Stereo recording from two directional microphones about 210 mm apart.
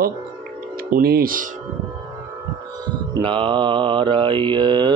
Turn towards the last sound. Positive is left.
turn(degrees=-20)  # may be behind; listen again after turning